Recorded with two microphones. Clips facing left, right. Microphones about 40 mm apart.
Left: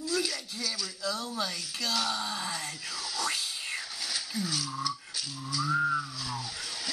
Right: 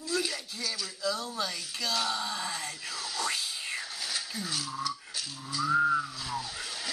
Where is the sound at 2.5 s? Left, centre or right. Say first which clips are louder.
Even; centre.